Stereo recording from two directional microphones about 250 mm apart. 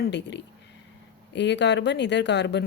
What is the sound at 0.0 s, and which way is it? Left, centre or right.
Speech, left.